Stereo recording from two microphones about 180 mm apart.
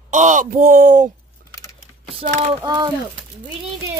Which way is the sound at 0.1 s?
40° right (ahead or behind).